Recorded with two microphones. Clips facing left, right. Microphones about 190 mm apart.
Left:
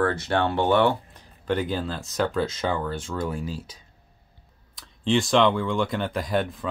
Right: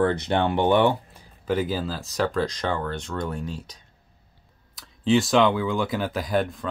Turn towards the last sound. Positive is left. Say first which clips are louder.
# right 1 dB
turn(degrees=0)  # may be behind; listen again after turning